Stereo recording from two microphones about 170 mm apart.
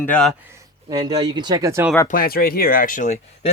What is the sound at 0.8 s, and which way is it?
Speech, 25° right (ahead or behind).